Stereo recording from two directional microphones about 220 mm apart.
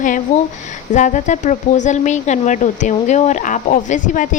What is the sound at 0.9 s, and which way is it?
A woman's voice, 35° left (ahead or behind).